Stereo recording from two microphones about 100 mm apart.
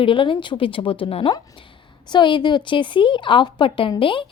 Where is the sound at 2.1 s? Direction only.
50° left (ahead or behind).